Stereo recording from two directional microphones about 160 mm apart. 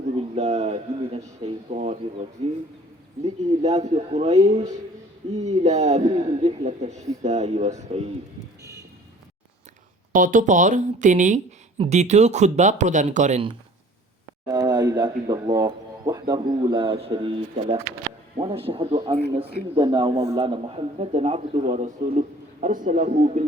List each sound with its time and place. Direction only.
0.2 s a sound: 45° right (ahead or behind)
3.2 s speech: 45° right (ahead or behind)
10.1 s speech: 55° right (ahead or behind)
14.4 s a man's voice: 25° right (ahead or behind); by 23.5 s 50° right (ahead or behind)